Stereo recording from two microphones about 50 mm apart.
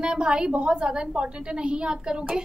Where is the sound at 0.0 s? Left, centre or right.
Centre.